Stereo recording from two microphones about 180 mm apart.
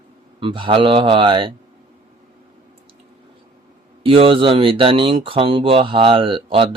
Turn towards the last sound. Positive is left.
turn(degrees=-30)  # may be behind; listen again after turning